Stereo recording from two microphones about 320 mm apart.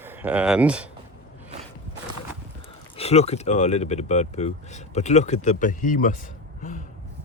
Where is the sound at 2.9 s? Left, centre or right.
Centre.